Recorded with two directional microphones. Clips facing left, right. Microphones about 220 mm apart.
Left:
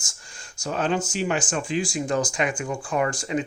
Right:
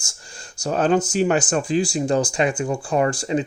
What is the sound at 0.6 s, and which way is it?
Speech, 40° right (ahead or behind).